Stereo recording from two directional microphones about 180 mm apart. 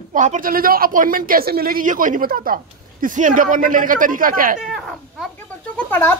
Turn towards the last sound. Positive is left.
turn(degrees=10)  # may be behind; listen again after turning